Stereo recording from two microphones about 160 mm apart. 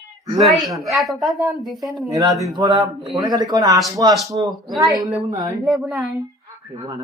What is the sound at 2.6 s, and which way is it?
A man's voice, 30° right (ahead or behind).